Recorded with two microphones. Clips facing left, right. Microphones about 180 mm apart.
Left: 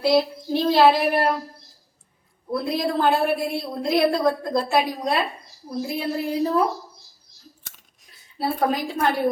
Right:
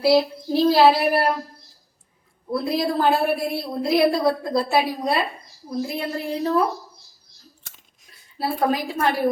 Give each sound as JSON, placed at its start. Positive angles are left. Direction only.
{"t": 0.0, "sound": "a woman's voice", "side_deg": -5}
{"t": 2.5, "sound": "a woman's voice", "side_deg": 0}
{"t": 5.8, "sound": "a woman's voice", "side_deg": 5}
{"t": 8.0, "sound": "a woman's voice", "side_deg": 0}